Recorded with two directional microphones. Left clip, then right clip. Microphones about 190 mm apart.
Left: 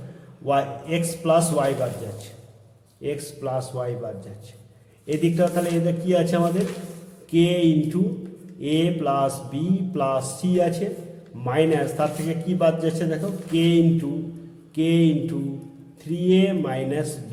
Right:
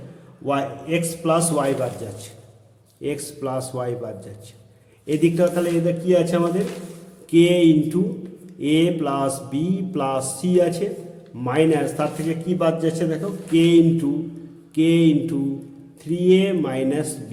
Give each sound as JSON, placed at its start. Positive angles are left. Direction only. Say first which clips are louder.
{"t": 0.4, "sound": "a man's voice", "louder": "left 1 dB", "side_deg": -15}
{"t": 3.0, "sound": "a man's voice", "louder": "right 2 dB", "side_deg": -20}
{"t": 5.0, "sound": "a man's voice", "louder": "right 3 dB", "side_deg": -15}